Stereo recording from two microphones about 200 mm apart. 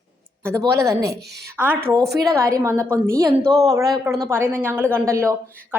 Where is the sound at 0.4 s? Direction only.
15° right (ahead or behind).